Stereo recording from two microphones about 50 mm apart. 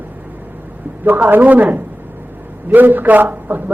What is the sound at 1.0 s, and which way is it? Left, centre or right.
Speech, right.